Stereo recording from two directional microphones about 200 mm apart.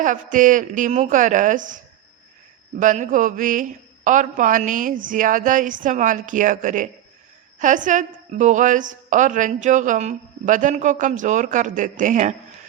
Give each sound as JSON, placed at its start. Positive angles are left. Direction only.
{"t": 0.0, "sound": "a woman's voice", "side_deg": -40}